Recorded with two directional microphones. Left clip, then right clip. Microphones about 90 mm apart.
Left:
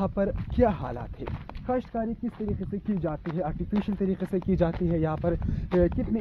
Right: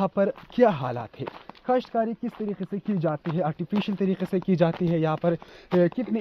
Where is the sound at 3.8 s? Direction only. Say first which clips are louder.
Right 2 dB; 30° right (ahead or behind).